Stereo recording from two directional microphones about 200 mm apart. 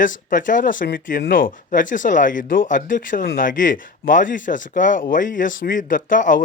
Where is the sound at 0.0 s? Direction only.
40° left (ahead or behind).